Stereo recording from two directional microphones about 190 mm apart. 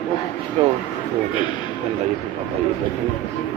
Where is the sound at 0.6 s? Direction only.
30° right (ahead or behind).